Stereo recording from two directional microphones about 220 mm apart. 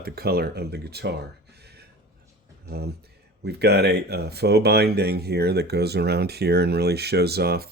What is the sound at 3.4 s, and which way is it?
Speech, 50° right (ahead or behind).